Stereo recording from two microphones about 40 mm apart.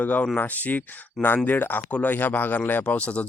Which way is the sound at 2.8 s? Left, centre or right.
Left.